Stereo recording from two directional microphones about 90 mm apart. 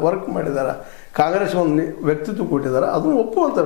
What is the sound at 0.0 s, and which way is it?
A man's voice, 25° left (ahead or behind).